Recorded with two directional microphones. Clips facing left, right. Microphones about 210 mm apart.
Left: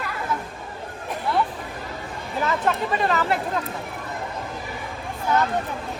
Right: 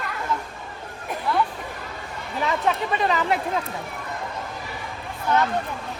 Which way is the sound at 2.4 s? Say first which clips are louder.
Even; centre (ahead or behind).